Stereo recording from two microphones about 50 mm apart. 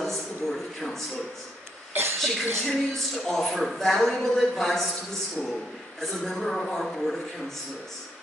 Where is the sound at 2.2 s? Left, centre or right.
Centre.